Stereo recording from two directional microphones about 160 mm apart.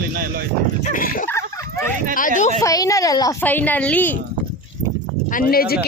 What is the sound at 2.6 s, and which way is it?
Speech, 20° left (ahead or behind).